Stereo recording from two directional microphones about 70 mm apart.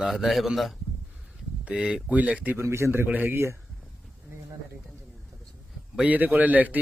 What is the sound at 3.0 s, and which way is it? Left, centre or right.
Speech, right.